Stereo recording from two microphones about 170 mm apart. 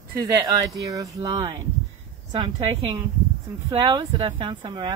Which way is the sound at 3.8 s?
25° right (ahead or behind).